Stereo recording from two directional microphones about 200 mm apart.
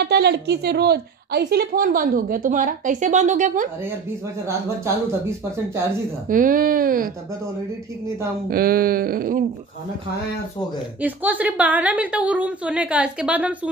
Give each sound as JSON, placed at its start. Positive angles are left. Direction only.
{"t": 0.0, "sound": "a woman's voice", "side_deg": -55}
{"t": 6.2, "sound": "a woman's voice", "side_deg": -40}
{"t": 8.5, "sound": "a woman's voice", "side_deg": -45}
{"t": 11.0, "sound": "a woman's voice", "side_deg": -10}